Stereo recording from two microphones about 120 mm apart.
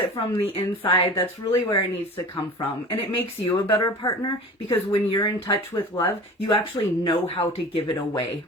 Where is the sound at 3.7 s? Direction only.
30° left (ahead or behind).